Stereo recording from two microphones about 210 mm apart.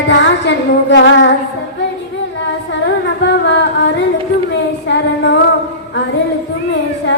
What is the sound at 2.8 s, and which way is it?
Singing, 55° left (ahead or behind).